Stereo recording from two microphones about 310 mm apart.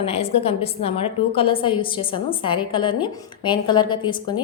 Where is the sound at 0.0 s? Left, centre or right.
Centre.